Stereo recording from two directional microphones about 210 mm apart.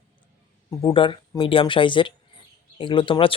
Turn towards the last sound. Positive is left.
turn(degrees=25)  # may be behind; listen again after turning